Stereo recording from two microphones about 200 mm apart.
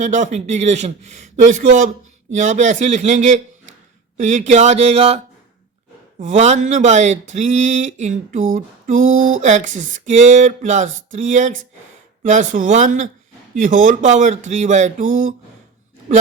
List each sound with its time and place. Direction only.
0.0 s speech: 35° right (ahead or behind)
8.5 s a sound: 40° right (ahead or behind)
9.1 s speech: 90° right
9.4 s speech: 35° right (ahead or behind)